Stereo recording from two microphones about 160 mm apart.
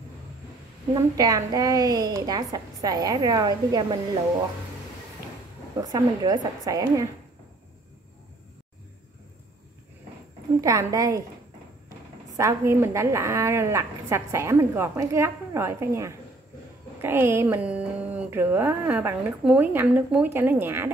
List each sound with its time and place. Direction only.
0.9 s a woman's voice: 20° right (ahead or behind)
5.8 s a woman's voice: 25° right (ahead or behind)
10.6 s a woman's voice: 20° right (ahead or behind)
12.3 s speech: 20° right (ahead or behind)